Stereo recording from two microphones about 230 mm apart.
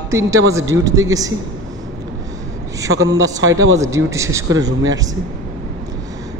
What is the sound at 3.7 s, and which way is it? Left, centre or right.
Speech, centre.